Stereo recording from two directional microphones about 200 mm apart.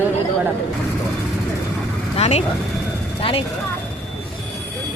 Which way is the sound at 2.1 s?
30° left (ahead or behind).